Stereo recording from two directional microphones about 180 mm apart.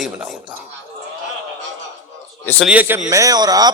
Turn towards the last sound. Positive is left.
turn(degrees=-20)  # may be behind; listen again after turning